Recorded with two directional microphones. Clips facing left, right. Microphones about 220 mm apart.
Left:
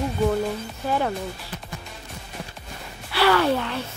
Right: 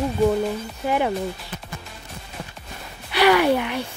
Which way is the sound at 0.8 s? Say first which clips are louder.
Right 2 dB; 15° right (ahead or behind).